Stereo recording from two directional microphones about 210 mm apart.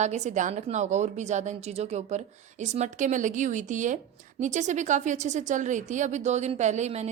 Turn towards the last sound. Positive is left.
turn(degrees=-35)  # may be behind; listen again after turning